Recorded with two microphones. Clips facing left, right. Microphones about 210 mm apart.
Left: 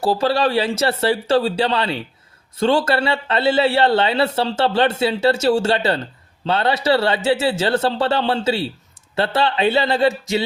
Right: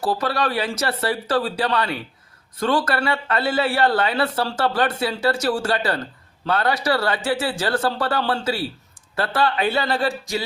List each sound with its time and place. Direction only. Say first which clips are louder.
0.0 s speech: left 5 dB; 30° left (ahead or behind)